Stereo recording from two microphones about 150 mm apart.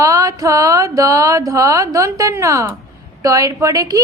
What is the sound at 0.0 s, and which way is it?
Speech, 20° right (ahead or behind).